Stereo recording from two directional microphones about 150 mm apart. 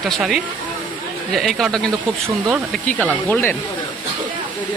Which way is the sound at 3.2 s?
15° left (ahead or behind).